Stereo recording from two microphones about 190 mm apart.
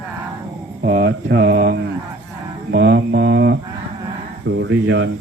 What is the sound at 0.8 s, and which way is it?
A man's voice, 50° right (ahead or behind).